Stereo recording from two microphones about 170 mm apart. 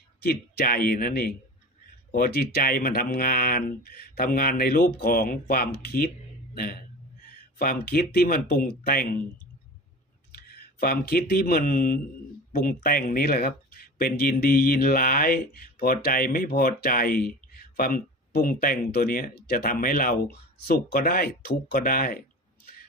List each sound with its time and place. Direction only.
0.2 s speech: 65° left (ahead or behind)
7.6 s speech: 65° left (ahead or behind)
10.3 s speech: 65° left (ahead or behind)